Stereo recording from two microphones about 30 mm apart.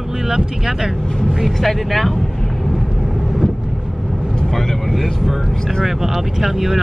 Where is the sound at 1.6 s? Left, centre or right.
Centre.